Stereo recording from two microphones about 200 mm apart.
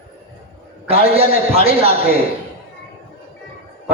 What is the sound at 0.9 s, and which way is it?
A man's voice, 30° right (ahead or behind).